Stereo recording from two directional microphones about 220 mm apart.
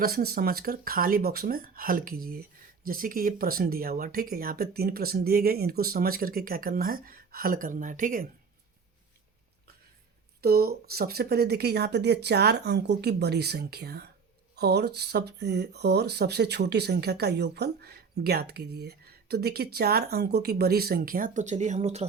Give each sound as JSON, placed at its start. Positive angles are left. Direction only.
{"t": 0.0, "sound": "speech", "side_deg": -45}
{"t": 10.4, "sound": "speech", "side_deg": -45}